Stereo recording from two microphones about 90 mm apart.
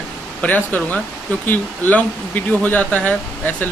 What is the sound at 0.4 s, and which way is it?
Speech, 20° left (ahead or behind).